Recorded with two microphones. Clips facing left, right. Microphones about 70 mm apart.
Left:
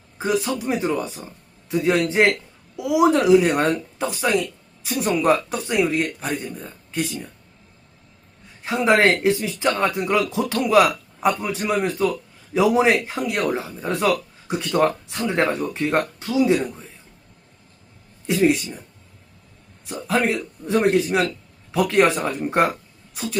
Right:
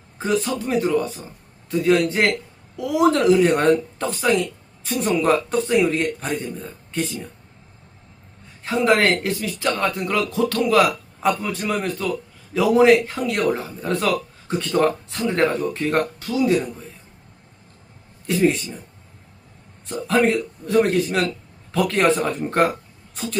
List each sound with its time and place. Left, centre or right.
0.4 s speech: centre
8.6 s speech: centre
18.3 s speech: centre
19.8 s a man's voice: centre
20.7 s speech: left